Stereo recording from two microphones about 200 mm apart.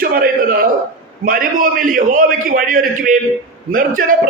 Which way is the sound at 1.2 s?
45° right (ahead or behind).